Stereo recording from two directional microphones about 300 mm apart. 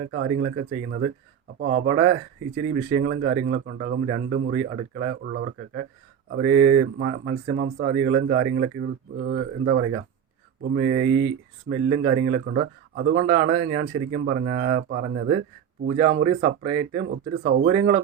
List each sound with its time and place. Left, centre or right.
0.1 s a man's voice: right